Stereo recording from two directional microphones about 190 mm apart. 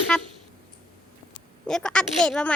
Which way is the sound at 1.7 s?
5° left (ahead or behind).